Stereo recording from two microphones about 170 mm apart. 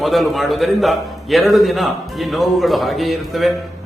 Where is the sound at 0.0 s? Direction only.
Centre (ahead or behind).